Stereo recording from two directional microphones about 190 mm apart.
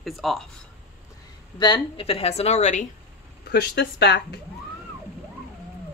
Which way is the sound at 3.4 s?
60° left (ahead or behind).